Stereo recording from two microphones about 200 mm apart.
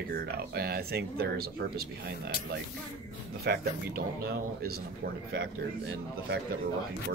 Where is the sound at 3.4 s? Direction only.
50° right (ahead or behind).